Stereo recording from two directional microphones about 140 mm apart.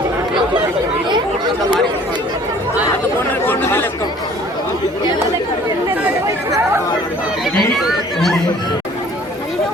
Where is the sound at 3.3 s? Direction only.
15° left (ahead or behind).